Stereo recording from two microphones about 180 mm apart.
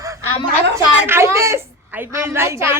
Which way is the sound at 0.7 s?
15° right (ahead or behind).